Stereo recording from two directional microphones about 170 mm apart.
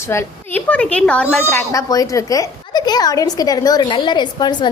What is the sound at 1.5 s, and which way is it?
A woman's voice, 20° left (ahead or behind).